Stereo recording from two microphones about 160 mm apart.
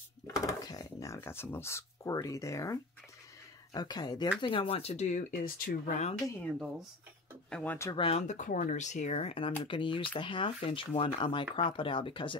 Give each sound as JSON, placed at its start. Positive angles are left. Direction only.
{"t": 0.3, "sound": "speech", "side_deg": 25}
{"t": 7.4, "sound": "speech", "side_deg": 10}
{"t": 7.9, "sound": "speech", "side_deg": 35}